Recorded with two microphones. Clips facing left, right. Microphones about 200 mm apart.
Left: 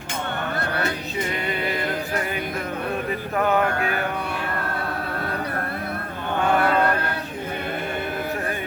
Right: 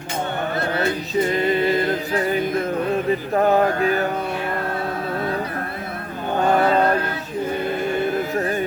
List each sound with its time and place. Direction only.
3.3 s music: 35° right (ahead or behind)
6.6 s mantra: 30° right (ahead or behind)